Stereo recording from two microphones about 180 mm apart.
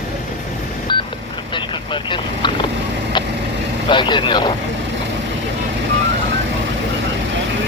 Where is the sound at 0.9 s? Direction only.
25° left (ahead or behind).